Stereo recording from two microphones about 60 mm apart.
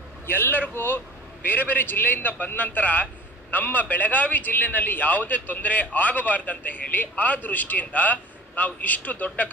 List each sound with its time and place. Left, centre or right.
0.3 s a man's voice: left